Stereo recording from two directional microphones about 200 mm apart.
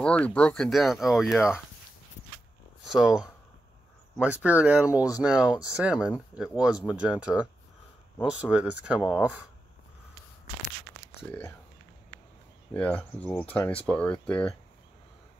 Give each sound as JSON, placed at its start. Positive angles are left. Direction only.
{"t": 0.0, "sound": "speech", "side_deg": 5}
{"t": 2.8, "sound": "speech", "side_deg": 0}
{"t": 4.9, "sound": "speech", "side_deg": 15}
{"t": 5.2, "sound": "speech", "side_deg": -5}
{"t": 12.7, "sound": "speech", "side_deg": 5}